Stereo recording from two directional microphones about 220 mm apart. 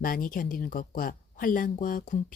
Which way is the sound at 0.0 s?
40° left (ahead or behind).